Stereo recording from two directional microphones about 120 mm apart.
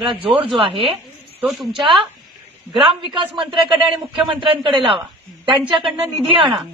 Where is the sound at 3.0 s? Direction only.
40° right (ahead or behind).